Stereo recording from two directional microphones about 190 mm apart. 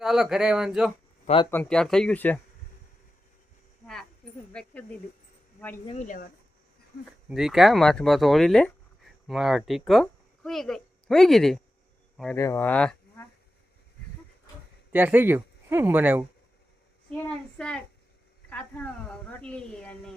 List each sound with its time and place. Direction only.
0.0 s speech: centre (ahead or behind)
4.5 s speech: 5° left (ahead or behind)
5.8 s speech: 35° left (ahead or behind)
7.3 s speech: 5° right (ahead or behind)
12.4 s speech: 15° left (ahead or behind)
14.9 s speech: 10° right (ahead or behind)
17.1 s speech: 5° left (ahead or behind)